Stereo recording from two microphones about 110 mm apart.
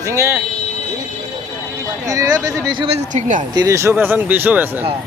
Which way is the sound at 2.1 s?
35° right (ahead or behind).